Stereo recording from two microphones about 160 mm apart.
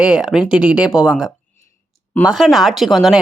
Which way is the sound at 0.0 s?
5° right (ahead or behind).